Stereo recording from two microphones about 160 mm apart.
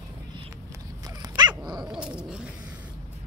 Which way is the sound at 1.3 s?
25° right (ahead or behind).